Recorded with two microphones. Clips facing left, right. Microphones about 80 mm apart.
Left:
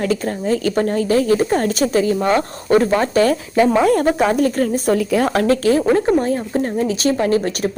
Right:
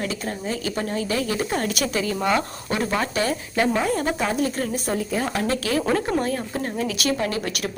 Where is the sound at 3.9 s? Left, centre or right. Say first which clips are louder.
Left 8 dB; left.